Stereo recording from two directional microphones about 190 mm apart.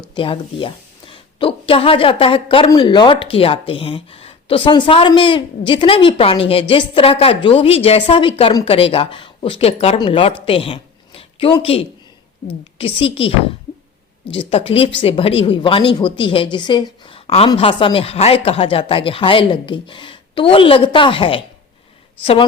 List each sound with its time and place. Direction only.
0.1 s a woman's voice: 30° left (ahead or behind)
13.0 s a woman's voice: 30° left (ahead or behind)